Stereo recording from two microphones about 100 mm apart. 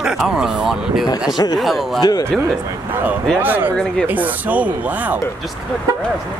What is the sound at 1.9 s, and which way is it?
Speech, 45° left (ahead or behind).